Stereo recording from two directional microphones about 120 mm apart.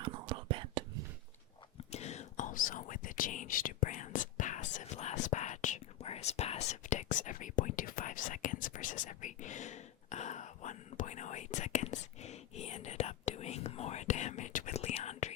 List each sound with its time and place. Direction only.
0.4 s whispering: 45° right (ahead or behind)
1.9 s whispering: 65° left (ahead or behind)